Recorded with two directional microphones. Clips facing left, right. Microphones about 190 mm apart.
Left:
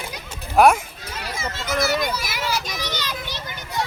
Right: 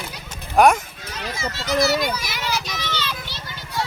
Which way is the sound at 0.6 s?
5° left (ahead or behind).